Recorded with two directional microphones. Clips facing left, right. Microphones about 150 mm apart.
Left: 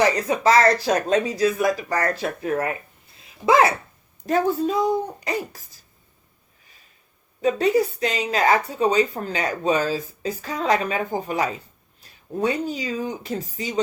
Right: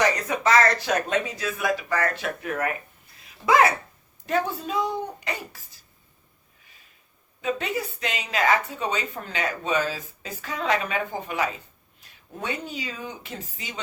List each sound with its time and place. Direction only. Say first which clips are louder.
0.0 s speech: left 4 dB; 35° left (ahead or behind)
4.2 s speech: left 6 dB; 40° left (ahead or behind)
7.4 s speech: left 9 dB; 35° left (ahead or behind)